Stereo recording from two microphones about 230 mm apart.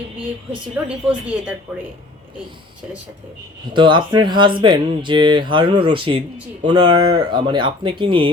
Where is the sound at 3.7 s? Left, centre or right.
Right.